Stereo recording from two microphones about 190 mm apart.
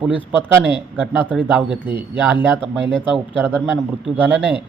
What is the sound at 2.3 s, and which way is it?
A man's voice, 10° right (ahead or behind).